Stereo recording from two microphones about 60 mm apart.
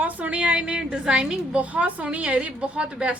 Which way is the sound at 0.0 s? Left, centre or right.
Right.